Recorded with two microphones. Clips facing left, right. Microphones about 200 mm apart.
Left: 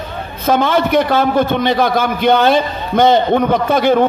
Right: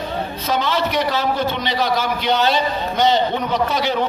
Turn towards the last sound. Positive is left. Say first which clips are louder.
# left 7 dB
turn(degrees=50)  # may be behind; listen again after turning